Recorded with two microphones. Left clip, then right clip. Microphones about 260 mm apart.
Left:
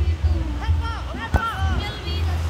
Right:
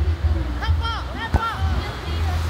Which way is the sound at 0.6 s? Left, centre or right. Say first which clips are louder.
Right 7 dB; right.